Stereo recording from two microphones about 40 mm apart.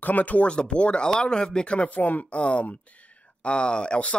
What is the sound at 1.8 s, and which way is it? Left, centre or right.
Speech, left.